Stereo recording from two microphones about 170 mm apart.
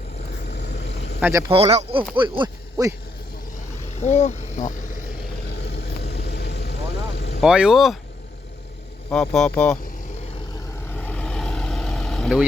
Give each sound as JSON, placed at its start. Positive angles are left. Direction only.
{"t": 0.4, "sound": "vehicle", "side_deg": 75}
{"t": 1.2, "sound": "speech", "side_deg": -20}
{"t": 1.5, "sound": "speech", "side_deg": -35}
{"t": 3.9, "sound": "speech", "side_deg": 40}
{"t": 5.5, "sound": "vehicle", "side_deg": 80}
{"t": 7.4, "sound": "speech", "side_deg": -5}
{"t": 9.0, "sound": "speech", "side_deg": 5}
{"t": 10.9, "sound": "vehicle", "side_deg": 10}